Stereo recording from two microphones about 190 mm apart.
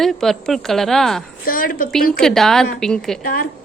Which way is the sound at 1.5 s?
45° left (ahead or behind).